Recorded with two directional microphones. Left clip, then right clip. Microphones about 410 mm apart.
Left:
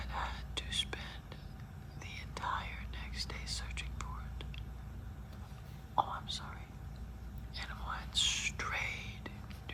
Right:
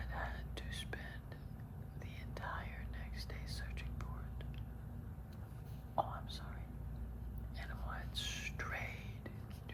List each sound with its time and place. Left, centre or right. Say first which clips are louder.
0.0 s whispering: left 5 dB; centre
6.0 s whispering: left 6 dB; centre